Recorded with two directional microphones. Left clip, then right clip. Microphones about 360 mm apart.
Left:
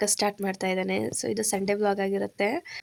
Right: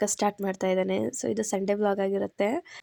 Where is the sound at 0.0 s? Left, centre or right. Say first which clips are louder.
Even; left.